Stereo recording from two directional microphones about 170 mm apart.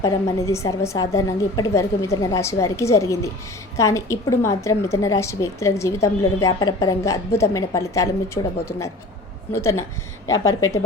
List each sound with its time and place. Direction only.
0.0 s a woman's voice: 15° left (ahead or behind)
9.5 s a woman's voice: 15° left (ahead or behind)